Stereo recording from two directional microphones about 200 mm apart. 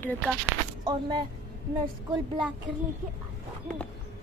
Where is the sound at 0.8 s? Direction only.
20° right (ahead or behind).